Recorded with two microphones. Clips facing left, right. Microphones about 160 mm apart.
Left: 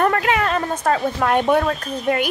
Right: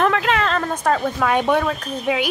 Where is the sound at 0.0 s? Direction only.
5° left (ahead or behind).